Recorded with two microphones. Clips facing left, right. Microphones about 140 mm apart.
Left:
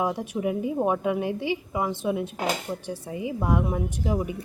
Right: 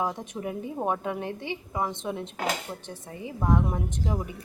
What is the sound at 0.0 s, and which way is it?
A woman's voice, 10° left (ahead or behind).